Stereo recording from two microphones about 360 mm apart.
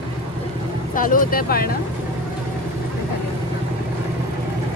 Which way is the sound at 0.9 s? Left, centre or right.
Left.